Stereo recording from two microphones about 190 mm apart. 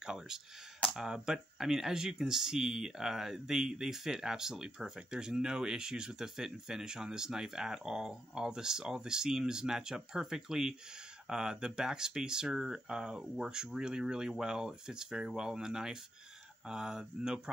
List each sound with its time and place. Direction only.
0.0 s speech: 5° right (ahead or behind)